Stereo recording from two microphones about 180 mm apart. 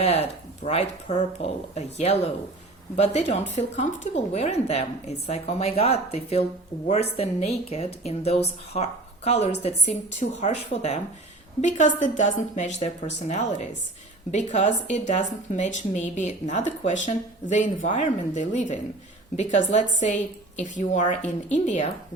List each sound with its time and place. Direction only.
0.0 s a woman's voice: 35° left (ahead or behind)